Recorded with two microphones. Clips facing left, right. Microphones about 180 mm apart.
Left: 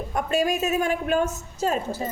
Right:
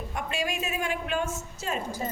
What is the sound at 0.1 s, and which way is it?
A woman's voice, 40° left (ahead or behind).